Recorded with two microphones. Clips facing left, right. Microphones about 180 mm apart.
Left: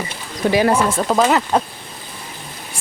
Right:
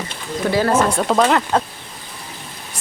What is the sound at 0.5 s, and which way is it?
Speech, 15° left (ahead or behind).